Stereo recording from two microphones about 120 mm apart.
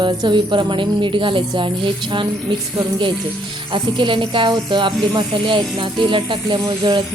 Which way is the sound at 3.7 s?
45° right (ahead or behind).